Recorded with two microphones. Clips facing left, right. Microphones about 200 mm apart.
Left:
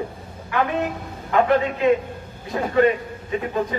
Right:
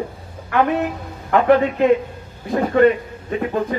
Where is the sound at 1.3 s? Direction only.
50° right (ahead or behind).